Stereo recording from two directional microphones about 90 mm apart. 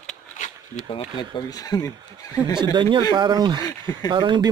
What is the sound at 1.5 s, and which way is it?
Speech, 45° left (ahead or behind).